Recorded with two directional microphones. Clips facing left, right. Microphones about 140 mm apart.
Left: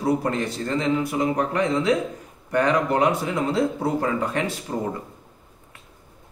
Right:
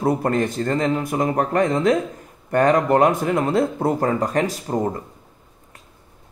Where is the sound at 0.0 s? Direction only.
50° right (ahead or behind).